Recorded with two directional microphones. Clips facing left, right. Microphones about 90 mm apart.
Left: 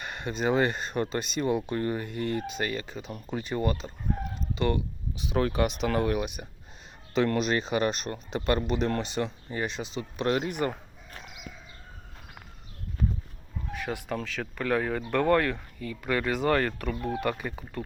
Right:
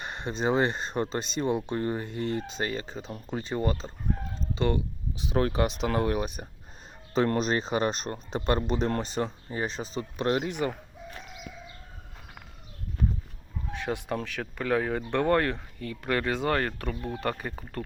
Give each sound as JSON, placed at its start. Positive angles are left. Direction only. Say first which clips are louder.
{"t": 0.0, "sound": "speech", "louder": "even", "side_deg": -30}
{"t": 13.8, "sound": "speech", "louder": "right 2 dB", "side_deg": -20}